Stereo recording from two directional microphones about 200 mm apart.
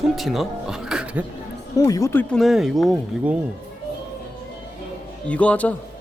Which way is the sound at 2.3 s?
Centre (ahead or behind).